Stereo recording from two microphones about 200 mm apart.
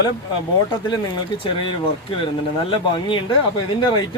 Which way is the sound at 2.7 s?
25° left (ahead or behind).